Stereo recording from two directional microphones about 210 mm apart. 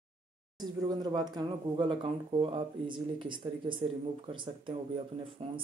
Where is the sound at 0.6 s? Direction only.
20° right (ahead or behind).